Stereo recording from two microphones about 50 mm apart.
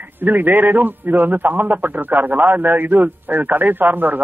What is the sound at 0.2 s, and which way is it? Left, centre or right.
A man's voice, right.